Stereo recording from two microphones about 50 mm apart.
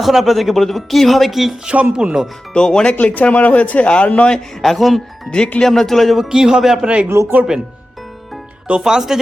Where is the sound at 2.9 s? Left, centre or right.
Left.